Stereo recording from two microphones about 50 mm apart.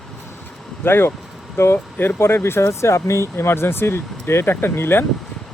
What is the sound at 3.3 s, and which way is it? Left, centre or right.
Speech, left.